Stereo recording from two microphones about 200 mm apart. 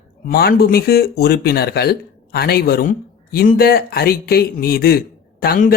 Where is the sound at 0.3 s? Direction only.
50° left (ahead or behind).